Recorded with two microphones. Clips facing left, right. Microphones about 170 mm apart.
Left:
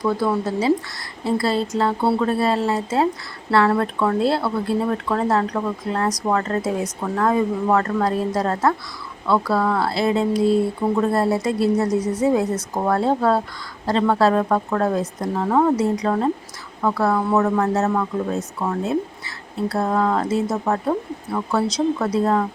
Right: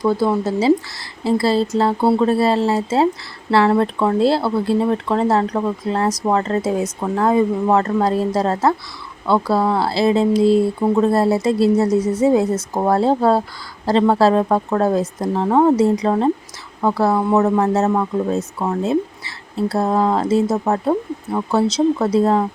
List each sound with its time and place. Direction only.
0.0 s speech: 25° right (ahead or behind)
2.0 s speech: 20° right (ahead or behind)
2.4 s speech: 30° right (ahead or behind)